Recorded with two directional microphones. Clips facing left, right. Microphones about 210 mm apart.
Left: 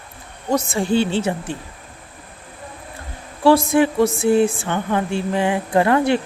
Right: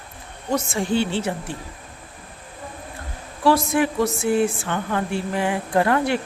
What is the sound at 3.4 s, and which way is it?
Speech, 30° left (ahead or behind).